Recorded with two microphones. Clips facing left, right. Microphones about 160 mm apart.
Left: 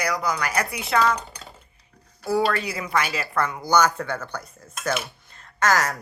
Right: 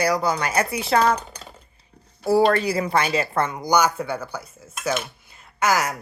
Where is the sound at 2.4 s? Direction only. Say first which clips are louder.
Right 6 dB; 35° right (ahead or behind); by 4.9 s 5° right (ahead or behind).